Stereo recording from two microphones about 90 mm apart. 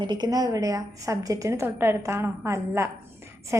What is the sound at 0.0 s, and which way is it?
A woman's voice, 55° right (ahead or behind).